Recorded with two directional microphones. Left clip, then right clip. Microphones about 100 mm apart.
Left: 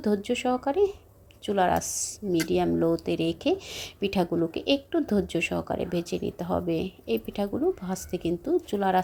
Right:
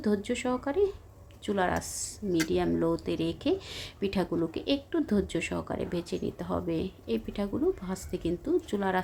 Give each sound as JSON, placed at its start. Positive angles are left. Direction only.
{"t": 0.0, "sound": "speech", "side_deg": 30}